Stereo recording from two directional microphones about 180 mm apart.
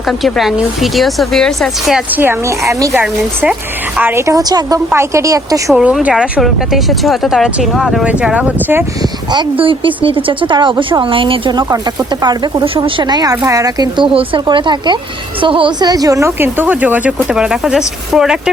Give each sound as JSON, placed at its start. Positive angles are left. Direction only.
{"t": 0.1, "sound": "speech", "side_deg": 0}
{"t": 2.9, "sound": "speech", "side_deg": -10}
{"t": 5.7, "sound": "speech", "side_deg": -5}
{"t": 9.3, "sound": "speech", "side_deg": -25}